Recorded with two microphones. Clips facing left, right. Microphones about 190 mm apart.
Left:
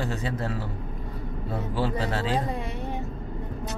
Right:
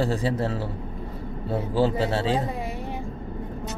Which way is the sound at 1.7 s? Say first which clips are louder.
Right 5 dB; 25° right (ahead or behind).